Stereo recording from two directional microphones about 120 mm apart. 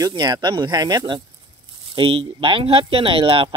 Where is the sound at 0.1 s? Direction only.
40° right (ahead or behind).